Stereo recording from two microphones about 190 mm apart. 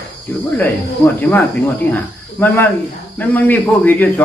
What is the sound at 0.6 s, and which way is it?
A man's voice, 10° left (ahead or behind).